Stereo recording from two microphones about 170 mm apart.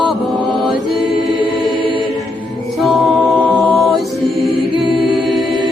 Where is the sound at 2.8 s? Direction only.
Centre (ahead or behind).